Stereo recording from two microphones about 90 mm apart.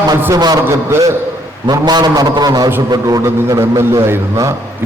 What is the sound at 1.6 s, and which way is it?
A man's voice, 50° right (ahead or behind).